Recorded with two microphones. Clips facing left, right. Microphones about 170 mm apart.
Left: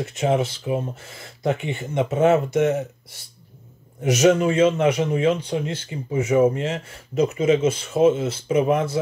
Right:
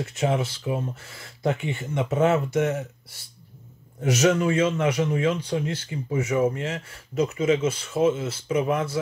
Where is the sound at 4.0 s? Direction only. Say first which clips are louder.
Left 4 dB; 20° left (ahead or behind).